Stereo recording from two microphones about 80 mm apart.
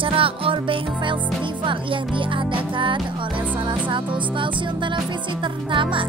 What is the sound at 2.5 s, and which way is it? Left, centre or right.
Music, right.